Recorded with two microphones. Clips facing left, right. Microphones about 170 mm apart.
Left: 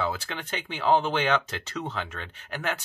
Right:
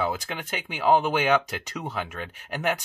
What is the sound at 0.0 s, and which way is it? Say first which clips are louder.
Speech: right 2 dB; 15° right (ahead or behind).